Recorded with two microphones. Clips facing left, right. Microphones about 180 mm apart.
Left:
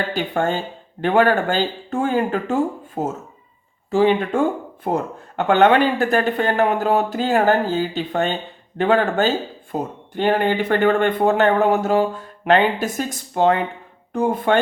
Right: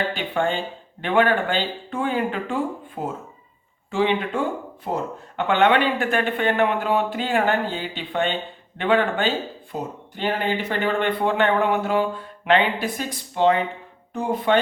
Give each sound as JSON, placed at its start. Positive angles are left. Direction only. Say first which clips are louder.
{"t": 0.1, "sound": "speech", "louder": "left 3 dB", "side_deg": 45}
{"t": 9.7, "sound": "speech", "louder": "left 6 dB", "side_deg": 55}